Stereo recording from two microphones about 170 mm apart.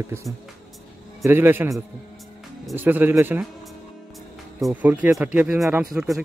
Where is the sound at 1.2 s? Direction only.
15° right (ahead or behind).